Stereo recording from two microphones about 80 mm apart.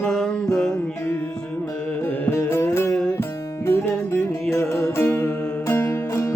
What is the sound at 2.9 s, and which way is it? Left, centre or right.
Music, centre.